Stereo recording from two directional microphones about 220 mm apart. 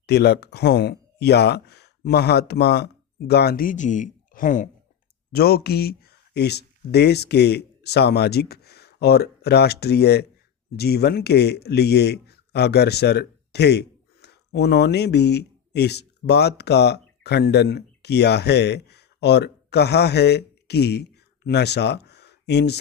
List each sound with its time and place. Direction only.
0.0 s speech: 50° left (ahead or behind)